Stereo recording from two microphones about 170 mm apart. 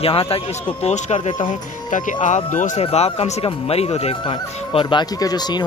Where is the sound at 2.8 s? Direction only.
35° left (ahead or behind).